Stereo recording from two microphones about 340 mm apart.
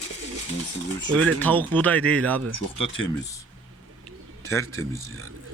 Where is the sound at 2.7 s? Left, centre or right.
Centre.